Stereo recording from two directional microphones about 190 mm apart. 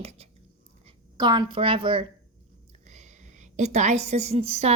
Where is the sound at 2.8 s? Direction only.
40° right (ahead or behind).